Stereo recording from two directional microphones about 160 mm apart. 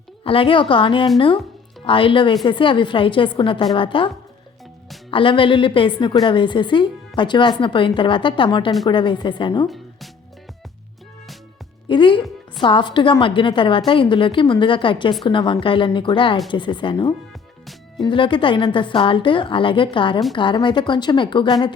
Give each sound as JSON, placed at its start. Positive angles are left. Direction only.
{"t": 0.3, "sound": "a woman's voice", "side_deg": 35}
{"t": 5.1, "sound": "a woman's voice", "side_deg": 30}
{"t": 9.6, "sound": "music", "side_deg": 0}
{"t": 11.9, "sound": "a woman's voice", "side_deg": 30}